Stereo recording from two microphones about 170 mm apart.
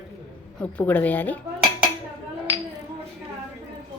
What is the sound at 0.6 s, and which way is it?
Speech, 10° left (ahead or behind).